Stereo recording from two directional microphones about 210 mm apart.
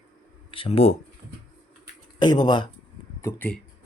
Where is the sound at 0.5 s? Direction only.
25° left (ahead or behind).